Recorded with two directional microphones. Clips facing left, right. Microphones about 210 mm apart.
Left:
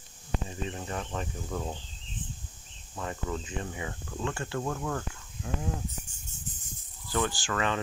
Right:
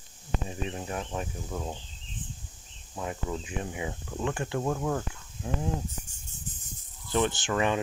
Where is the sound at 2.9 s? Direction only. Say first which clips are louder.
Right 1 dB; 10° right (ahead or behind).